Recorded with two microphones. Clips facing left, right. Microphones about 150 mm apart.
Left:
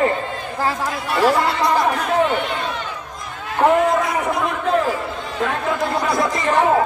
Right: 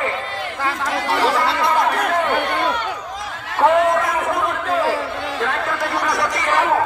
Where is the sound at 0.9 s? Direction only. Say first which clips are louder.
Right 1 dB; 90° right.